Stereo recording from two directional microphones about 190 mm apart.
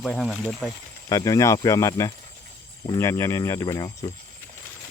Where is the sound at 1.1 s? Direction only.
20° left (ahead or behind).